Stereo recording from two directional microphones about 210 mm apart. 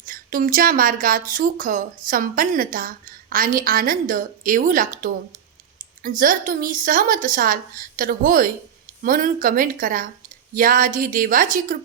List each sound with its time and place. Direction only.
0.0 s a woman's voice: 40° right (ahead or behind)